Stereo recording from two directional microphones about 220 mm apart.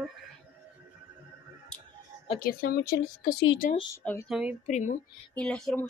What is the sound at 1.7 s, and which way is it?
Clicking, 5° left (ahead or behind).